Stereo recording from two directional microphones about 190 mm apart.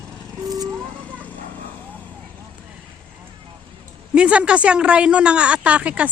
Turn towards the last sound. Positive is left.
turn(degrees=-5)  # may be behind; listen again after turning